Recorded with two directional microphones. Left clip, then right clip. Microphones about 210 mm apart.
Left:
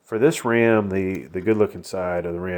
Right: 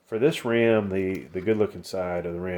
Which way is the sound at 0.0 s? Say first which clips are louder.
Left 4 dB; 30° left (ahead or behind).